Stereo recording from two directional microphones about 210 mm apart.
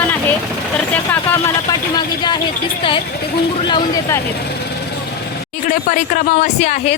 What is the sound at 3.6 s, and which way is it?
Speech, 20° left (ahead or behind).